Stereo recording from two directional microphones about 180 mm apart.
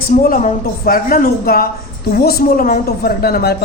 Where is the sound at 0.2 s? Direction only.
50° left (ahead or behind).